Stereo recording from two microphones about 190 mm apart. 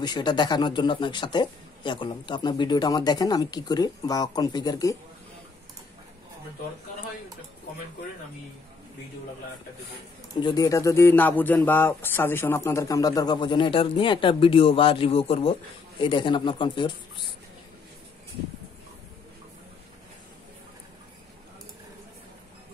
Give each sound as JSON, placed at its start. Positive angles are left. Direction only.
{"t": 0.0, "sound": "speech", "side_deg": 25}
{"t": 10.4, "sound": "speech", "side_deg": 20}